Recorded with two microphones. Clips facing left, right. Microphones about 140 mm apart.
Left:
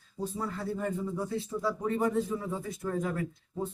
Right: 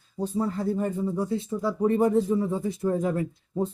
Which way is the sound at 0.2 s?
30° right (ahead or behind).